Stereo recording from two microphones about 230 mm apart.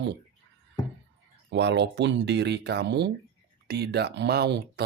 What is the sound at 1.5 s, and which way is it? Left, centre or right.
Speech, right.